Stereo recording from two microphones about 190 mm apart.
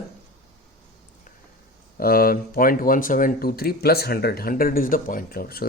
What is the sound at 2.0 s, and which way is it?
Speech, 50° left (ahead or behind).